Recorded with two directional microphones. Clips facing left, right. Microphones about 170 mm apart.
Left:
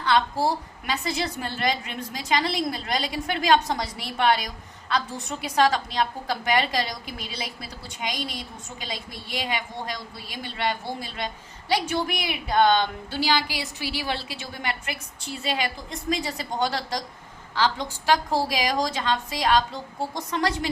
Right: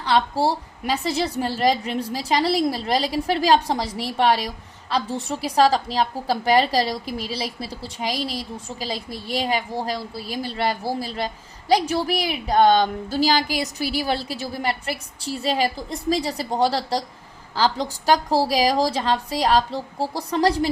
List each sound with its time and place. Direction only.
0.0 s a woman's voice: 30° right (ahead or behind)